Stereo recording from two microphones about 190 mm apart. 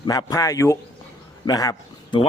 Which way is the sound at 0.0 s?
20° left (ahead or behind).